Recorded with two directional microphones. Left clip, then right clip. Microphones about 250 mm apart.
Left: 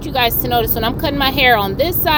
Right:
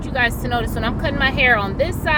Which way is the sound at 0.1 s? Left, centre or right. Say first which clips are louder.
Left 4 dB; left.